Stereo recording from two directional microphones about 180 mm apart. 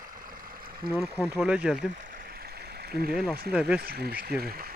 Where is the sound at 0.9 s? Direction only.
Centre (ahead or behind).